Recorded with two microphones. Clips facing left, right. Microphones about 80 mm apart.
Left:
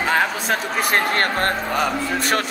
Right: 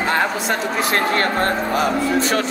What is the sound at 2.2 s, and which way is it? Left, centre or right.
Speech, left.